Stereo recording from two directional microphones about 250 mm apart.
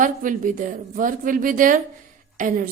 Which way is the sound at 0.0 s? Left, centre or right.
Right.